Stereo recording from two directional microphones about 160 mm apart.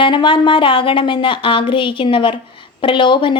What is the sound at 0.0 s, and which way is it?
A woman's voice, 30° left (ahead or behind).